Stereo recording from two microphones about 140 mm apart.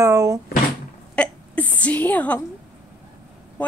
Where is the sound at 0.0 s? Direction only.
25° right (ahead or behind).